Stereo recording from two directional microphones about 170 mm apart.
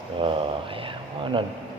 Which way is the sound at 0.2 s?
30° right (ahead or behind).